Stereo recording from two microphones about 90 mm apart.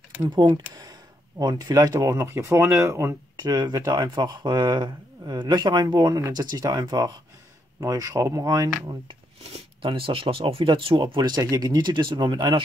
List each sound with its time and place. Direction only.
0.2 s speech: 55° right (ahead or behind)
1.4 s speech: 40° right (ahead or behind)
3.3 s speech: 50° right (ahead or behind)
9.8 s speech: 75° right (ahead or behind)
11.1 s speech: 50° right (ahead or behind)